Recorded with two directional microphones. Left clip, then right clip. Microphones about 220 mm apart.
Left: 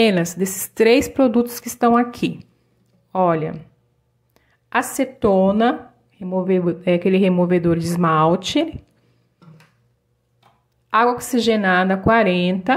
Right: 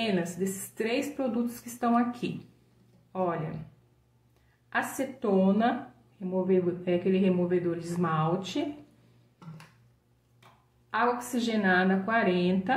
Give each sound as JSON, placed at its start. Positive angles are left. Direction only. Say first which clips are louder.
{"t": 0.0, "sound": "a woman's voice", "louder": "left 13 dB", "side_deg": 45}
{"t": 10.9, "sound": "speech", "louder": "left 11 dB", "side_deg": 40}